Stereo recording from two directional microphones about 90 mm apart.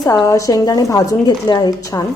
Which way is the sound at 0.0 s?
40° left (ahead or behind).